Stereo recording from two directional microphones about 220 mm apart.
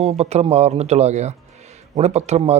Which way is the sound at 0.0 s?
30° right (ahead or behind).